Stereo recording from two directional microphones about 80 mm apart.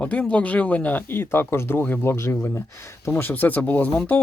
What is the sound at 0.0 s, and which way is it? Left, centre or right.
Speech, centre.